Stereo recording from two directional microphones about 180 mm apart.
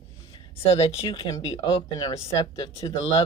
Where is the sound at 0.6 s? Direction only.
35° left (ahead or behind).